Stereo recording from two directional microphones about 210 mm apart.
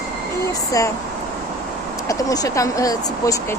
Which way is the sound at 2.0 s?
15° left (ahead or behind).